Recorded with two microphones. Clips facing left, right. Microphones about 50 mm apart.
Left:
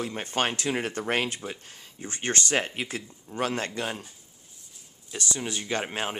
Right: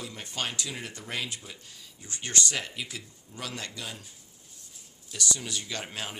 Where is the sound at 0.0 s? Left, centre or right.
Left.